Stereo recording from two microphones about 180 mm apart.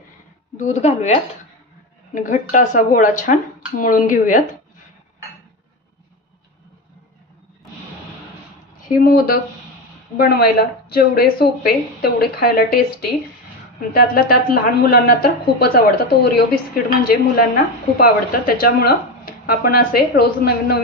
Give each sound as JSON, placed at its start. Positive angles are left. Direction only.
{"t": 0.6, "sound": "a woman's voice", "side_deg": 40}
{"t": 8.8, "sound": "speech", "side_deg": 55}